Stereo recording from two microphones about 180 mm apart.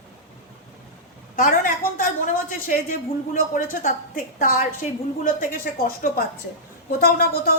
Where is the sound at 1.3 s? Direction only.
50° left (ahead or behind).